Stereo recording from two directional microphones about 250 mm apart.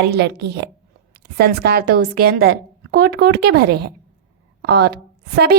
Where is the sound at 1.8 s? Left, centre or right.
Right.